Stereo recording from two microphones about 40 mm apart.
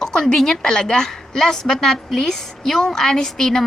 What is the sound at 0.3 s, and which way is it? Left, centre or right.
A woman's voice, centre.